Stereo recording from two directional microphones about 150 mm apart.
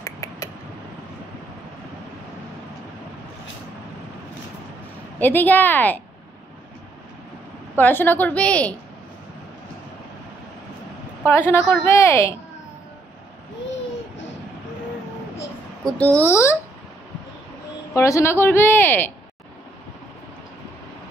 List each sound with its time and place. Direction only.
0.0 s a sound: 20° left (ahead or behind)
5.2 s a woman's voice: 10° left (ahead or behind)
7.7 s a woman's voice: 15° left (ahead or behind)
11.2 s a woman's voice: 15° left (ahead or behind)
15.8 s a woman's voice: 10° left (ahead or behind)
17.9 s a woman's voice: 20° left (ahead or behind)